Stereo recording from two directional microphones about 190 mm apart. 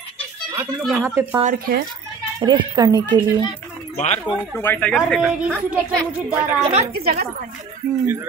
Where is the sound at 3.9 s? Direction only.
40° left (ahead or behind).